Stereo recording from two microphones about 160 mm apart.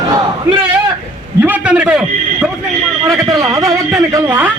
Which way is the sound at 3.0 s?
20° right (ahead or behind).